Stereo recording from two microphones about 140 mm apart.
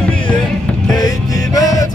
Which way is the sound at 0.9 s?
25° left (ahead or behind).